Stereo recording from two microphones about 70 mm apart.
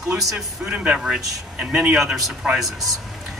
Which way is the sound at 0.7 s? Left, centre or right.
Centre.